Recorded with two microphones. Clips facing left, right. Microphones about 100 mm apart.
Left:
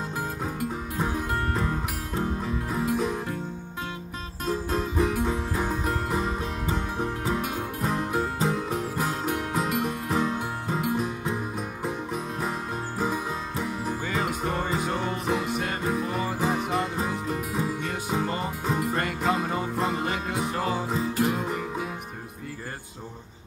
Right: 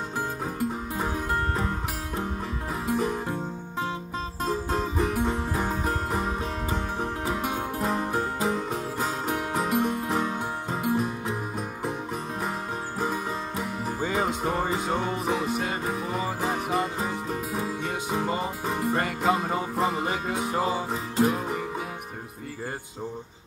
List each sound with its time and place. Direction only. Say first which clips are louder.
0.9 s music: left 1 dB; centre (ahead or behind)
4.7 s music: left 2 dB; centre (ahead or behind)
13.0 s music: left 1 dB; centre (ahead or behind)
14.0 s music: right 4 dB; 30° right (ahead or behind)
14.4 s music: right 1 dB; 5° right (ahead or behind)